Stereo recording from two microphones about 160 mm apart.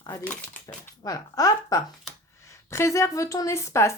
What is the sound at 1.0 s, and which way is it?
Speech, 20° left (ahead or behind).